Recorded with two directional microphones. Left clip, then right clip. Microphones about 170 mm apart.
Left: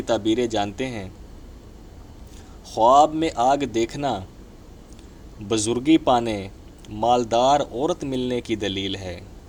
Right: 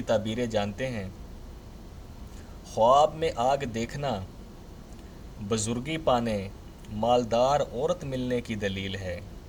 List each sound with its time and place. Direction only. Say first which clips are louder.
0.0 s speech: left 6 dB; 30° left (ahead or behind)
2.6 s speech: left 5 dB; 30° left (ahead or behind)
5.5 s speech: left 11 dB; 25° left (ahead or behind)